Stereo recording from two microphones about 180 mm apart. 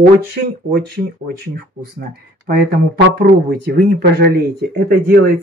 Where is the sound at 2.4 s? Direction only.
55° right (ahead or behind).